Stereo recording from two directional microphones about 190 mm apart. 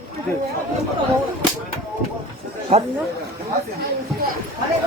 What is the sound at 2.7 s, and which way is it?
Speech, 35° right (ahead or behind).